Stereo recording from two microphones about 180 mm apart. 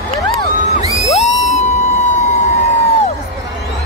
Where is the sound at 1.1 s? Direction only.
35° left (ahead or behind).